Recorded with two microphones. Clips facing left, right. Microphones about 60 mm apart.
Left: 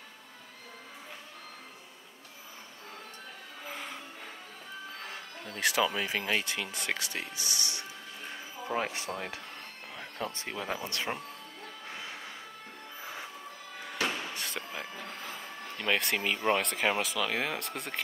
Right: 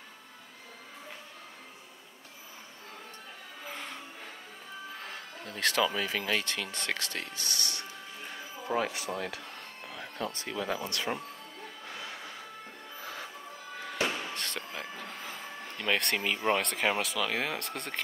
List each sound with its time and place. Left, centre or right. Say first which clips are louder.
3.6 s music: even; centre
5.0 s speech: even; centre
8.7 s speech: right 2 dB; left
13.0 s music: right 1 dB; centre
14.0 s speech: even; centre